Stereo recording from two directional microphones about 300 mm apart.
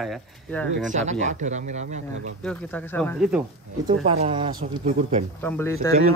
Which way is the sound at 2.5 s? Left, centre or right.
Centre.